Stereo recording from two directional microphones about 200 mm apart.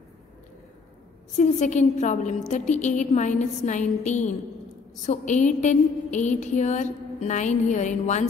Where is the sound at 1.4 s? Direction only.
35° left (ahead or behind).